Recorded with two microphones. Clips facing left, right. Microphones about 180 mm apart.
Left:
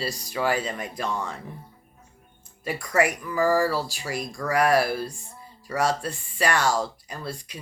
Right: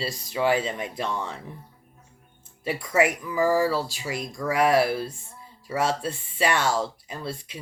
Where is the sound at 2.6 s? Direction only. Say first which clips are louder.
Right 1 dB; 25° right (ahead or behind).